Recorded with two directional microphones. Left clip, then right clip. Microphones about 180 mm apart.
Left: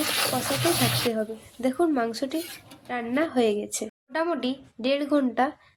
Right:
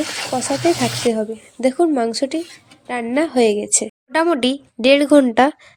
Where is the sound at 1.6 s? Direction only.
30° right (ahead or behind).